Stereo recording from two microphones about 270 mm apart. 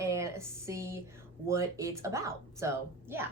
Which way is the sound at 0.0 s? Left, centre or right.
Centre.